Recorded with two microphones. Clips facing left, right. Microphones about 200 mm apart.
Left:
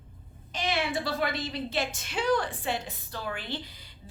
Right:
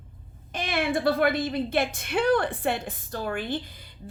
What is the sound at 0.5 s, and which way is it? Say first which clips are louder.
A woman's voice: right 3 dB; 55° right (ahead or behind).